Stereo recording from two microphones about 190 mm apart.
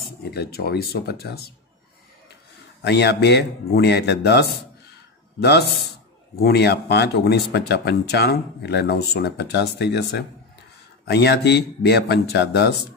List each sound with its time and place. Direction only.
0.0 s speech: 55° left (ahead or behind)
2.8 s speech: 65° left (ahead or behind)